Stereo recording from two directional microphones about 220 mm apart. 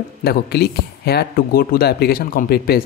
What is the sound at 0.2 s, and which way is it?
Speech, 45° left (ahead or behind).